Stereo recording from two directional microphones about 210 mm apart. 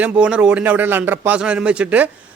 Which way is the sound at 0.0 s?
5° right (ahead or behind).